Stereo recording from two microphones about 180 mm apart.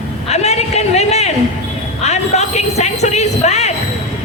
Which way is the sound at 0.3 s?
35° left (ahead or behind).